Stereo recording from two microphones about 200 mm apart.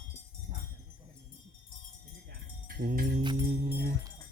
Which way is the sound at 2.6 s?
45° right (ahead or behind).